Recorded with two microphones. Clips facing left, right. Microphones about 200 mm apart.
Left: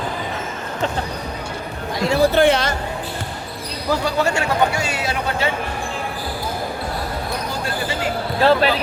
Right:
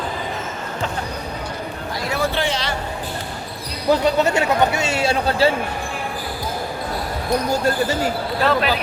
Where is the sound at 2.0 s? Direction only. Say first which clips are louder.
Left 7 dB; 30° left (ahead or behind).